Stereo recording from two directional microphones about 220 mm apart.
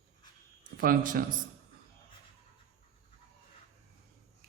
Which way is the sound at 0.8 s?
40° right (ahead or behind).